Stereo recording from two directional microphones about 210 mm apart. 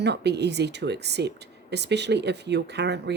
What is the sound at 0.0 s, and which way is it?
Speech, 55° right (ahead or behind).